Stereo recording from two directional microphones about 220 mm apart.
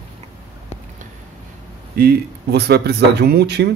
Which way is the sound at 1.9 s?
45° right (ahead or behind).